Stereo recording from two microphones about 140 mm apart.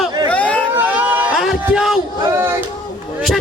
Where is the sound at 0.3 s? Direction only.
10° left (ahead or behind).